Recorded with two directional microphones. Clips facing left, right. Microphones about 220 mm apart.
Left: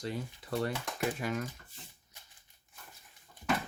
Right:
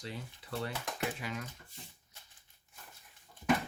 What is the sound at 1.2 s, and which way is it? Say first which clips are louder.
Speech: left 6 dB; 50° left (ahead or behind).